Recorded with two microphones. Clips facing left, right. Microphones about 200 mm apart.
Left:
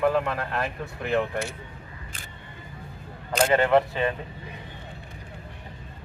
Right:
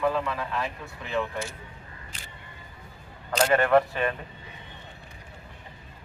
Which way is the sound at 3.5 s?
20° left (ahead or behind).